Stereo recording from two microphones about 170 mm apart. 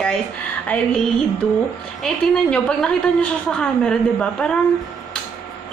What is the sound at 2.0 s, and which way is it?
A woman's voice, 5° left (ahead or behind).